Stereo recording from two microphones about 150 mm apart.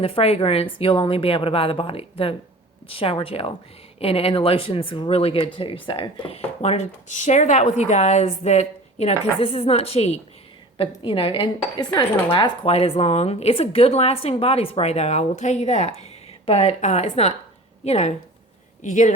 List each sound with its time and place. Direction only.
0.0 s a woman's voice: 40° left (ahead or behind)
18.8 s speech: 55° left (ahead or behind)